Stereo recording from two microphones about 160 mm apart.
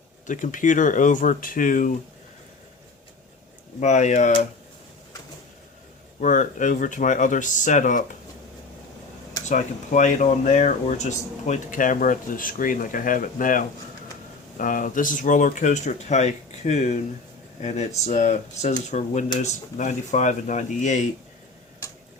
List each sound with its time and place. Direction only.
0.3 s speech: 55° left (ahead or behind)
3.8 s speech: 45° left (ahead or behind)
6.1 s speech: 55° left (ahead or behind)
9.5 s speech: 50° left (ahead or behind)